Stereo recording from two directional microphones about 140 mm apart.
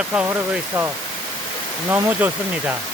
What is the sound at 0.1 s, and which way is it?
Speech, 5° right (ahead or behind).